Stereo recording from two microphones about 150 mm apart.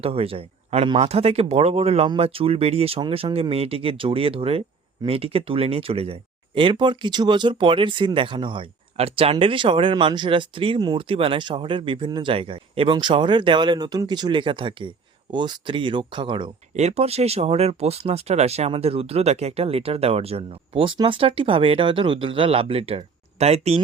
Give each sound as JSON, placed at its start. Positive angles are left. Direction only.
{"t": 0.0, "sound": "speech", "side_deg": -40}
{"t": 16.7, "sound": "speech", "side_deg": -45}